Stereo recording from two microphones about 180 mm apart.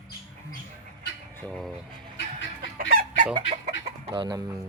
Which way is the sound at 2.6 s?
55° right (ahead or behind).